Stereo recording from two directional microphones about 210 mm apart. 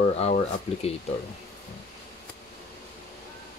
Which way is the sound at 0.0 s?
30° left (ahead or behind).